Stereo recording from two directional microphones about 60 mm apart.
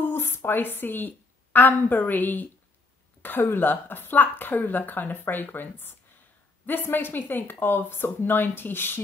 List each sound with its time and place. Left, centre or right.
0.0 s a woman's voice: left
3.2 s a sound: left
3.5 s speech: left